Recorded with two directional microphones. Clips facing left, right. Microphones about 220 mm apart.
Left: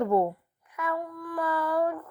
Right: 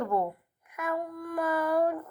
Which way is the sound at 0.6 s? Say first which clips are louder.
Left 2 dB; 10° right (ahead or behind).